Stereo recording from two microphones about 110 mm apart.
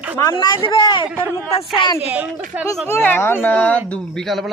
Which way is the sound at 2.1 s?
15° right (ahead or behind).